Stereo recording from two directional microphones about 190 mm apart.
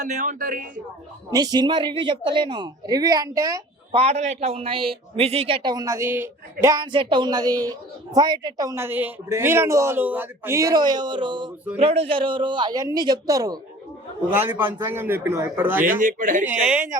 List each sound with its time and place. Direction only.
0.0 s speech: 40° right (ahead or behind)
1.3 s speech: 20° right (ahead or behind)
3.9 s a woman's voice: 35° right (ahead or behind); by 16.0 s 10° right (ahead or behind)
16.0 s speech: 45° right (ahead or behind)
16.6 s a woman's voice: 10° right (ahead or behind)